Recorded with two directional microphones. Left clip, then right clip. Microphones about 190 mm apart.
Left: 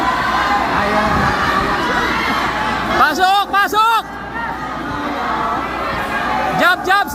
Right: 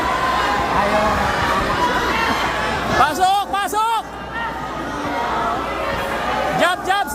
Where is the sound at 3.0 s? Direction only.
Centre (ahead or behind).